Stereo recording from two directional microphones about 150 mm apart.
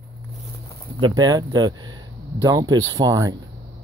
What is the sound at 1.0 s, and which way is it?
Speech, 25° right (ahead or behind).